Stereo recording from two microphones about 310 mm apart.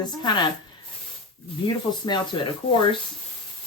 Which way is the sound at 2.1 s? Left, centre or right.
Centre.